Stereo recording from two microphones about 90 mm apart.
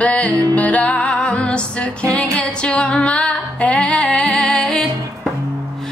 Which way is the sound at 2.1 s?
10° left (ahead or behind).